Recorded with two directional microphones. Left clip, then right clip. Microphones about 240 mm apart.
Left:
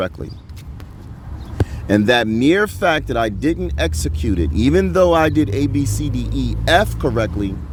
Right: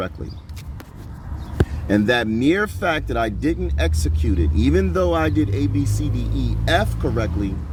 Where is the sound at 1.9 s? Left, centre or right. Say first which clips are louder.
Left 4 dB; left.